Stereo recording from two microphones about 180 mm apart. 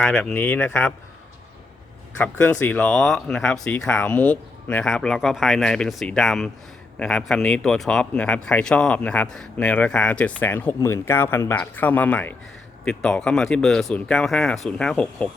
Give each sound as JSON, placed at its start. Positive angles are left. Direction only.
{"t": 0.0, "sound": "speech", "side_deg": 0}
{"t": 2.1, "sound": "speech", "side_deg": 5}